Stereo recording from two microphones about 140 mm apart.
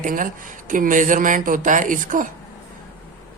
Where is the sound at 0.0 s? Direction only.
75° right (ahead or behind).